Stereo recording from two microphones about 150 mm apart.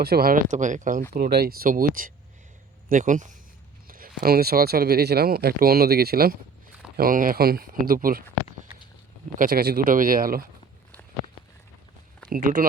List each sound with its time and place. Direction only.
0.0 s speech: 90° right; by 1.0 s 60° right (ahead or behind)
1.1 s speech: 85° right; by 3.3 s 55° right (ahead or behind)
3.8 s speech: 75° right (ahead or behind); by 6.3 s 90° right
6.9 s speech: 70° right (ahead or behind)
9.4 s speech: 80° right
12.3 s speech: 65° right (ahead or behind)